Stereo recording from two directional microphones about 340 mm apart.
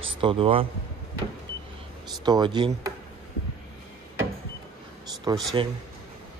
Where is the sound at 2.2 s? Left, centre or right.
Centre.